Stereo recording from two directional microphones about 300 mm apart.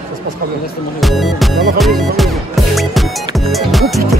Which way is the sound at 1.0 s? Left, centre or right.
Centre.